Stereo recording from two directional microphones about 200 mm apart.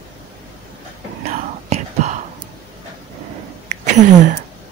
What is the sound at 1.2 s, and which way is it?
Whispering, 35° right (ahead or behind).